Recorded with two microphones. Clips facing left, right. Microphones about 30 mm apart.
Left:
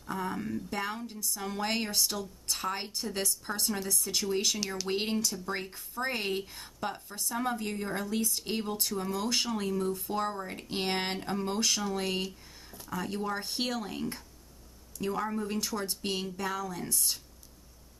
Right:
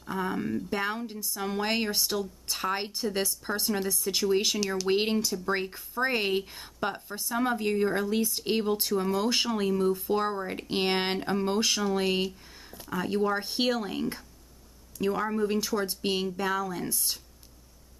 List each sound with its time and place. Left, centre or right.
0.0 s speech: centre
4.6 s speech: centre
4.8 s speech: centre